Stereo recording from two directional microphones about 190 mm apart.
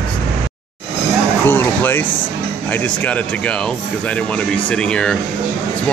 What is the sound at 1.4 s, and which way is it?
Speech, 10° left (ahead or behind).